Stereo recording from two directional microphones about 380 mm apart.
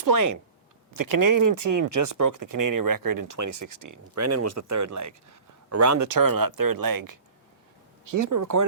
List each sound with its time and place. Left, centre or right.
0.0 s speech: right